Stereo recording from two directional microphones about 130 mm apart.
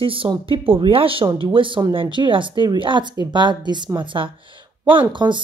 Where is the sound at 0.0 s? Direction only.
45° right (ahead or behind).